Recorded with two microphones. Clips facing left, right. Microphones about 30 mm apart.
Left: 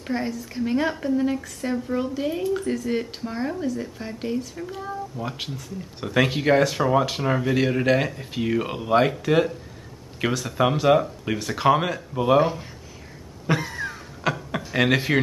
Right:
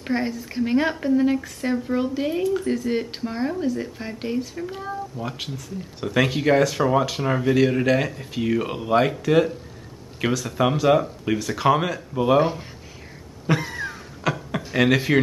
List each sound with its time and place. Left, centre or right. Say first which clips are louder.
0.0 s speech: right 2 dB; centre
2.4 s speech: right 2 dB; centre
5.1 s speech: even; centre
13.5 s a sound: right 1 dB; centre
14.8 s speech: right 2 dB; centre